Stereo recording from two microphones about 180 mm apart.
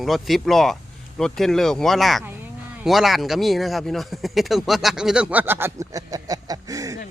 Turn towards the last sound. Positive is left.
turn(degrees=-20)  # may be behind; listen again after turning